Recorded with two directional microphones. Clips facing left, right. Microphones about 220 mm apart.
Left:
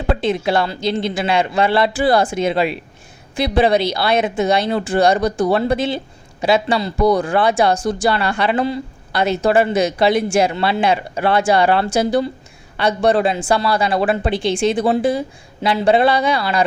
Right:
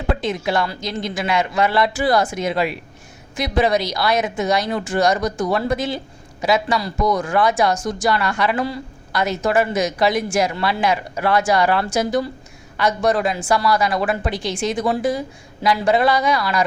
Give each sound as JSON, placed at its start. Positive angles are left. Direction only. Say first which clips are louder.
{"t": 0.2, "sound": "speech", "louder": "left 3 dB", "side_deg": 30}